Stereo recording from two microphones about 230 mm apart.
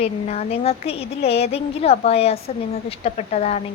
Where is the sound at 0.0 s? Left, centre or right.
Left.